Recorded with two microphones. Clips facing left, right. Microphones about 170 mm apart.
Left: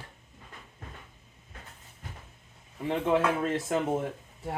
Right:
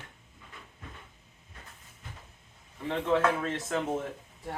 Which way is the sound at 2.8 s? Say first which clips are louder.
Left 1 dB; 15° left (ahead or behind).